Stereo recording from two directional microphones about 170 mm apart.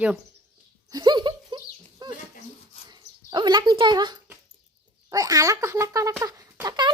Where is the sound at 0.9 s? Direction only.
25° right (ahead or behind).